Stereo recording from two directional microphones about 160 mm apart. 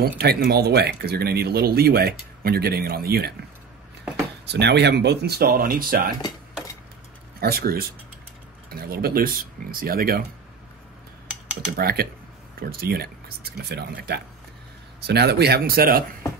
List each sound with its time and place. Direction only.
0.2 s speech: 85° right
4.5 s speech: 90° right; by 6.1 s 65° right (ahead or behind)
7.3 s speech: 70° right (ahead or behind)
11.7 s speech: 75° right (ahead or behind)